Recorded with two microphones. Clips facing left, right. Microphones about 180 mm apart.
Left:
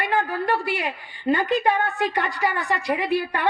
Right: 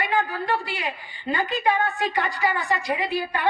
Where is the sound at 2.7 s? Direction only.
60° left (ahead or behind).